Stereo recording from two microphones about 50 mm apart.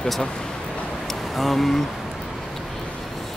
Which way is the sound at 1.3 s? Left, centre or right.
Centre.